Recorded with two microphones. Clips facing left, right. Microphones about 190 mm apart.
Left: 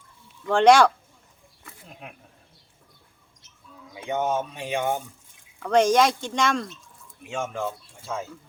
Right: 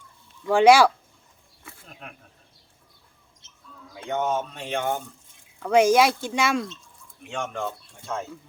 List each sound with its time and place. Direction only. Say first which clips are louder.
0.4 s speech: right 1 dB; 5° right (ahead or behind)
3.4 s a sound: right 1 dB; 25° right (ahead or behind)
3.9 s speech: even; 10° left (ahead or behind)
5.5 s speech: right 1 dB; 10° right (ahead or behind)
7.2 s speech: left 1 dB; 5° left (ahead or behind)